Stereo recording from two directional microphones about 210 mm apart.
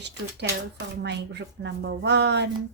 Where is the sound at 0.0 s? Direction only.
55° right (ahead or behind).